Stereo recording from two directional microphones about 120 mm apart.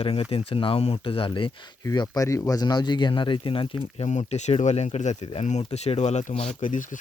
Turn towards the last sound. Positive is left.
turn(degrees=90)